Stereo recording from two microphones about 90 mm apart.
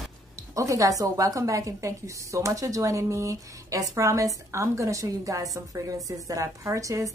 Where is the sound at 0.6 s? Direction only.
35° right (ahead or behind).